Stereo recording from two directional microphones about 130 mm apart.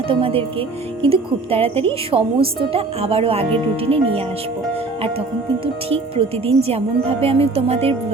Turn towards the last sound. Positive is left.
turn(degrees=-50)  # may be behind; listen again after turning